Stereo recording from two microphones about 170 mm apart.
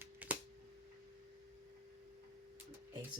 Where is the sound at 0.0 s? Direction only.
10° right (ahead or behind).